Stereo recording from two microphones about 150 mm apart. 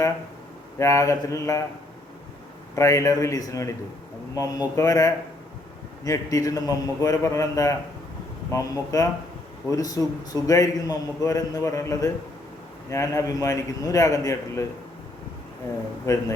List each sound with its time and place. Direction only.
0.8 s a man's voice: 20° left (ahead or behind)
2.7 s a man's voice: 20° left (ahead or behind)
4.8 s a man's voice: 25° left (ahead or behind)
16.1 s a man's voice: 20° left (ahead or behind)